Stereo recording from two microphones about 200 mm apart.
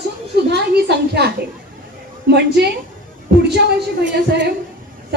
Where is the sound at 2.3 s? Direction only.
55° right (ahead or behind).